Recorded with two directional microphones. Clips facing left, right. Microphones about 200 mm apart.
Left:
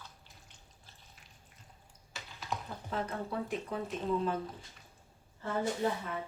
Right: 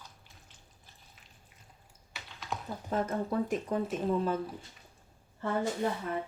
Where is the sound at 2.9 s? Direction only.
45° right (ahead or behind).